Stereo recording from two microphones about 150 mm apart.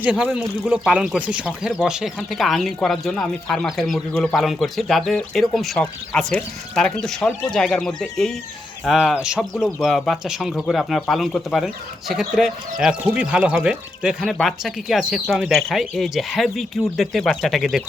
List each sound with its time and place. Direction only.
0.0 s speech: 10° right (ahead or behind)